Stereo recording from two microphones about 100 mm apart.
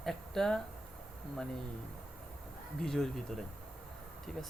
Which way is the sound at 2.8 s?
5° left (ahead or behind).